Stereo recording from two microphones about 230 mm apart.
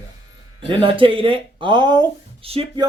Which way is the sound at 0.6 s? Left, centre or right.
Right.